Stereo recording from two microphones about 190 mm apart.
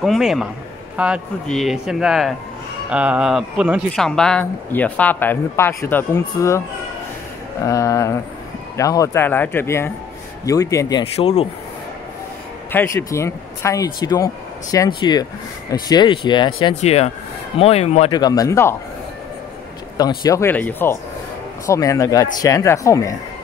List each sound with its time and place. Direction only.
0.0 s speech: centre (ahead or behind)
7.6 s speech: 15° left (ahead or behind)
11.1 s speech: 30° left (ahead or behind)
12.7 s speech: 15° left (ahead or behind); by 18.2 s 30° left (ahead or behind)
18.2 s speech: 20° left (ahead or behind)
20.0 s speech: 20° left (ahead or behind)